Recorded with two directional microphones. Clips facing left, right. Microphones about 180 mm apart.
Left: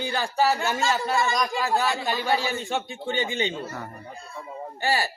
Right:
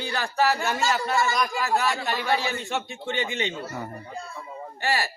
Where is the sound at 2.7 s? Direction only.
35° left (ahead or behind).